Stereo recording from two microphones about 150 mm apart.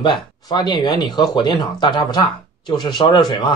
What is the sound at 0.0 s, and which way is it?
Speech, 30° left (ahead or behind).